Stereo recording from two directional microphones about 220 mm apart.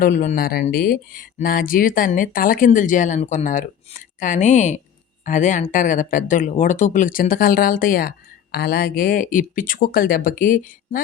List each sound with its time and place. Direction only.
0.0 s speech: 35° left (ahead or behind)